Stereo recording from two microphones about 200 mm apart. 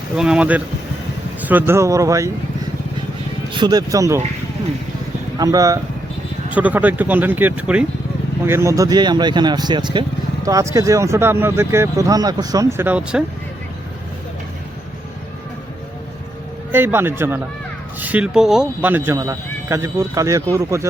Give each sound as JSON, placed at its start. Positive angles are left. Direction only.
{"t": 0.2, "sound": "speech", "side_deg": -5}
{"t": 3.5, "sound": "speech", "side_deg": -20}
{"t": 5.4, "sound": "speech", "side_deg": -15}
{"t": 16.7, "sound": "speech", "side_deg": -10}